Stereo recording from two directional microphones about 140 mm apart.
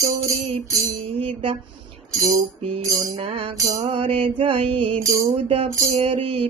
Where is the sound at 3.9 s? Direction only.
40° right (ahead or behind).